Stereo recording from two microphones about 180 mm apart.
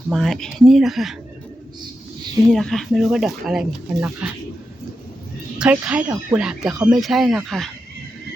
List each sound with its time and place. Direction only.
0.1 s speech: centre (ahead or behind)
2.5 s speech: centre (ahead or behind)
5.5 s speech: 5° right (ahead or behind)